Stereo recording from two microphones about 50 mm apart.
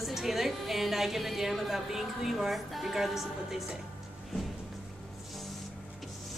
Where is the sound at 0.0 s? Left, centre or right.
Centre.